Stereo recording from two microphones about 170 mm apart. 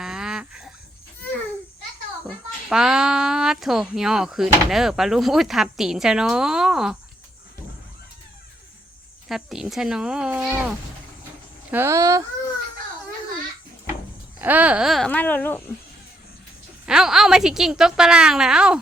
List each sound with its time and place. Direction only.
0.0 s a sound: 5° right (ahead or behind)
2.2 s speech: 5° right (ahead or behind)
9.3 s speech: centre (ahead or behind); by 12.2 s 20° right (ahead or behind)
14.4 s speech: 10° right (ahead or behind); by 15.6 s 10° left (ahead or behind)
16.8 s speech: 5° right (ahead or behind)